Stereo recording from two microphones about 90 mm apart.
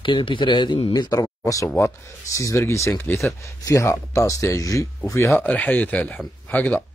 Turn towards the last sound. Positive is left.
turn(degrees=15)  # may be behind; listen again after turning